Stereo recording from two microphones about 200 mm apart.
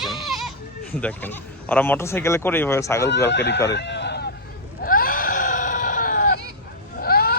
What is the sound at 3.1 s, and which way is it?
Speech, 60° left (ahead or behind).